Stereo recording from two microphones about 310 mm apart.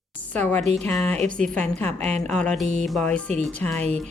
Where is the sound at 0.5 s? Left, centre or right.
Right.